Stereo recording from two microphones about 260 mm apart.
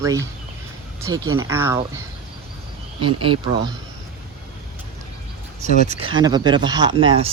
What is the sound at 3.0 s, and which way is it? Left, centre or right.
Speech, centre.